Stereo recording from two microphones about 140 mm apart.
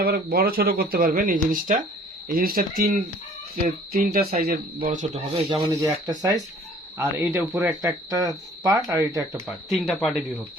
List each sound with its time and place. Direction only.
0.0 s speech: 90° right; by 1.8 s 70° right (ahead or behind)
2.2 s speech: 90° right; by 5.5 s 45° right (ahead or behind)
5.5 s speech: 30° right (ahead or behind)
9.5 s speech: centre (ahead or behind)